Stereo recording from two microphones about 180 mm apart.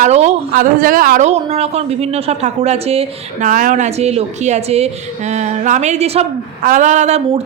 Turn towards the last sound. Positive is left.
turn(degrees=-35)  # may be behind; listen again after turning